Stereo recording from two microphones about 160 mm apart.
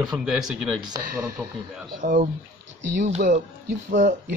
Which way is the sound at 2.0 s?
60° right (ahead or behind).